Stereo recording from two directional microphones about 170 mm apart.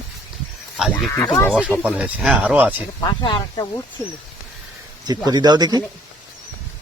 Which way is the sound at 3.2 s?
25° left (ahead or behind).